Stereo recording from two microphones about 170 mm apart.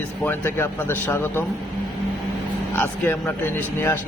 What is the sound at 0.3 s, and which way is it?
Speech, 15° left (ahead or behind).